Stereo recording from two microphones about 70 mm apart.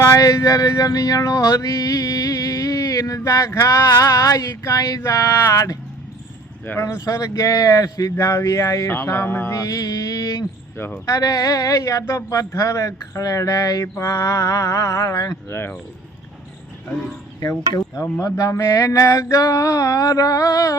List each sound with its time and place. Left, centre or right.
0.0 s male singing: left
6.7 s a woman's voice: left
9.0 s music: left
9.5 s mantra: left
10.8 s speech: left
11.0 s a woman's voice: left
13.8 s a woman's voice: left
15.4 s music: left
17.7 s male singing: left